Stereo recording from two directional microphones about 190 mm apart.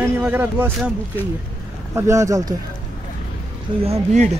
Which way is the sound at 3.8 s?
35° right (ahead or behind).